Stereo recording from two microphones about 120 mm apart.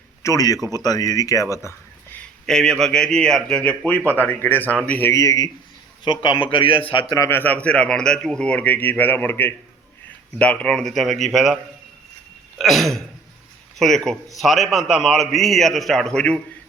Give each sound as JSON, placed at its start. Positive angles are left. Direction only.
{"t": 0.2, "sound": "speech", "side_deg": 25}
{"t": 2.5, "sound": "a man's voice", "side_deg": 5}
{"t": 5.1, "sound": "a man's voice", "side_deg": 25}
{"t": 6.1, "sound": "a man's voice", "side_deg": 45}
{"t": 7.3, "sound": "a man's voice", "side_deg": 15}